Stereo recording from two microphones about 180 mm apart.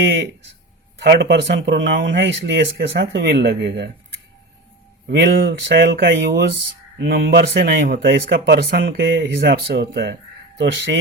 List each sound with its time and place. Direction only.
1.0 s speech: 65° right (ahead or behind)